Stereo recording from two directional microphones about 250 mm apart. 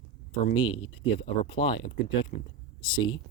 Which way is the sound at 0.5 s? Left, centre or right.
Centre.